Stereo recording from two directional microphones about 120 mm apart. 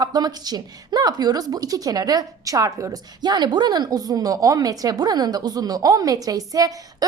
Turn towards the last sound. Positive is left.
turn(degrees=-30)  # may be behind; listen again after turning